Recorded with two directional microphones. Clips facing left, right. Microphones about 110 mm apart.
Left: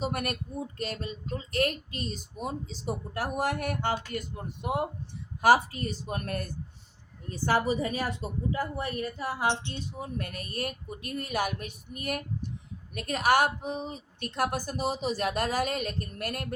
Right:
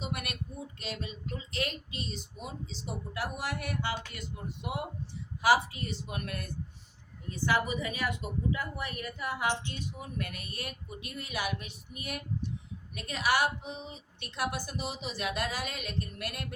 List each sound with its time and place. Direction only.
0.0 s a woman's voice: 45° left (ahead or behind)